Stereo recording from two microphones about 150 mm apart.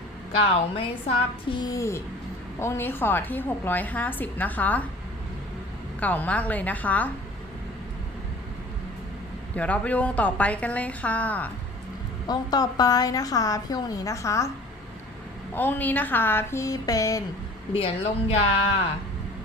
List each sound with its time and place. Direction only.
0.3 s a woman's voice: 40° left (ahead or behind); by 4.9 s 10° left (ahead or behind)
6.0 s a woman's voice: 10° left (ahead or behind)
9.6 s a woman's voice: 10° left (ahead or behind)
12.3 s a woman's voice: 25° left (ahead or behind)
15.5 s a woman's voice: 15° left (ahead or behind)
17.7 s a woman's voice: 40° left (ahead or behind)